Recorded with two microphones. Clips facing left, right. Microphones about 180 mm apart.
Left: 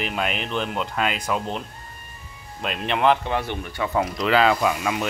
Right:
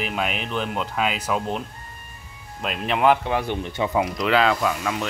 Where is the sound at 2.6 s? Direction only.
5° right (ahead or behind); by 3.9 s 20° right (ahead or behind).